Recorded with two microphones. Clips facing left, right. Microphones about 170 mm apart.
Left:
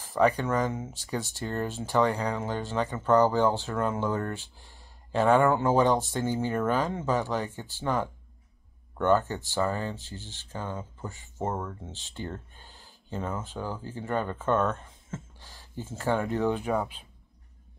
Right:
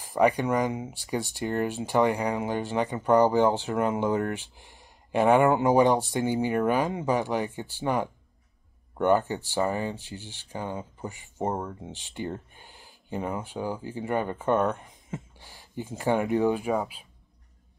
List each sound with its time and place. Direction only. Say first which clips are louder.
0.0 s speech: right 1 dB; 10° right (ahead or behind)